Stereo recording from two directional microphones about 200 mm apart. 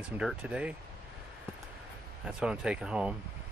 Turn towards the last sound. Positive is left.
turn(degrees=-5)  # may be behind; listen again after turning